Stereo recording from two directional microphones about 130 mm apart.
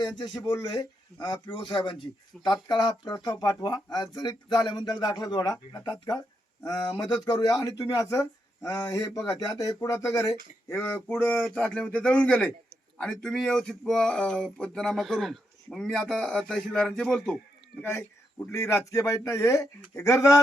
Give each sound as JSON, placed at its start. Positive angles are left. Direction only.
{"t": 0.2, "sound": "speech", "side_deg": 35}
{"t": 17.8, "sound": "speech", "side_deg": 20}